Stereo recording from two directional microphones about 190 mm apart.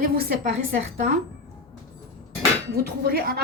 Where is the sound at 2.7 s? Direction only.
55° right (ahead or behind).